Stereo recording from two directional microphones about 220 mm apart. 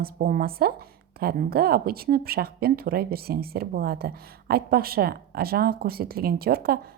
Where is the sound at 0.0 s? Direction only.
40° right (ahead or behind).